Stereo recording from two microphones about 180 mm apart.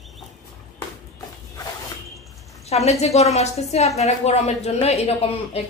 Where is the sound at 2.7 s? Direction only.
35° left (ahead or behind).